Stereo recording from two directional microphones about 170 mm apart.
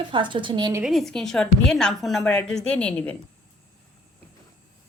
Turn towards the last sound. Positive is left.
turn(degrees=5)  # may be behind; listen again after turning